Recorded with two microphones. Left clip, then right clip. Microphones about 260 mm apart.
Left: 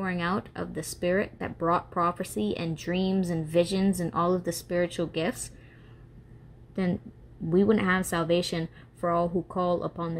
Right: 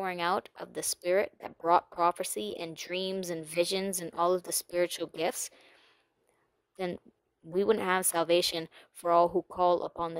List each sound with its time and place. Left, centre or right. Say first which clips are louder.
0.0 s speech: even; right
7.5 s speech: left 3 dB; right